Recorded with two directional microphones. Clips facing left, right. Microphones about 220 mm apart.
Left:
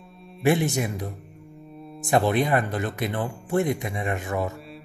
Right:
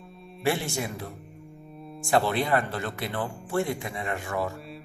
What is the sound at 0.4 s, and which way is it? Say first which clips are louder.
Speech: left 6 dB; 20° left (ahead or behind).